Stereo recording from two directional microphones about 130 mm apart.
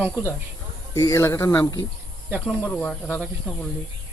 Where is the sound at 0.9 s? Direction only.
25° left (ahead or behind).